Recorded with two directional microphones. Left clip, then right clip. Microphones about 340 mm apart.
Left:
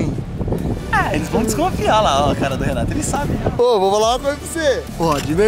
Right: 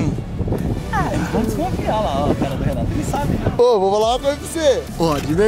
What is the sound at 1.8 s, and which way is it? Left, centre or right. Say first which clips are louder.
Speech: left 6 dB; left.